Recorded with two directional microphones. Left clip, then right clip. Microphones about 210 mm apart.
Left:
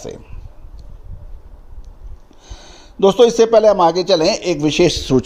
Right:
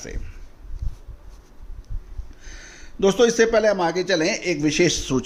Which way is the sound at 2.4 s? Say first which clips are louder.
Left 2 dB; 20° left (ahead or behind).